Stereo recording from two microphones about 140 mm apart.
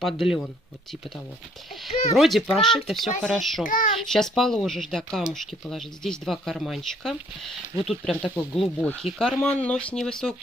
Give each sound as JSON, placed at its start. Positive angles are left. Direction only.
{"t": 0.0, "sound": "speech", "side_deg": 0}
{"t": 2.1, "sound": "speech", "side_deg": 0}
{"t": 3.6, "sound": "a child's voice", "side_deg": 75}
{"t": 4.1, "sound": "speech", "side_deg": 5}